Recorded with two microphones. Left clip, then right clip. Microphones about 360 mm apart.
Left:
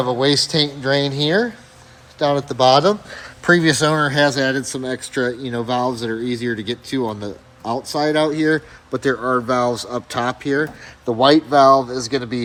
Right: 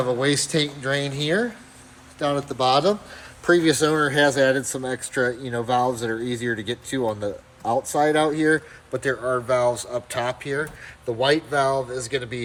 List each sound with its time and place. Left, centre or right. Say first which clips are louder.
0.1 s speech: left 5 dB; centre